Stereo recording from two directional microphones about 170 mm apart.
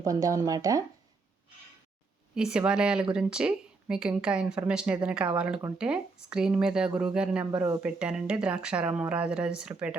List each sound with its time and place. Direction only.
0.0 s speech: 20° right (ahead or behind)
2.3 s speech: 5° right (ahead or behind)